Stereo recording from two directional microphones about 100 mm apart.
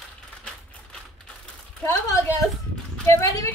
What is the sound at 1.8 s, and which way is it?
A woman's voice, 40° left (ahead or behind).